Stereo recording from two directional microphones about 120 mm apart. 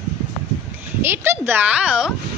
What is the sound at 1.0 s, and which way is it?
Speech, 20° right (ahead or behind).